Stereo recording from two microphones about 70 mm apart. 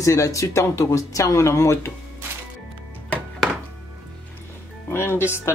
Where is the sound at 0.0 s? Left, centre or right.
Left.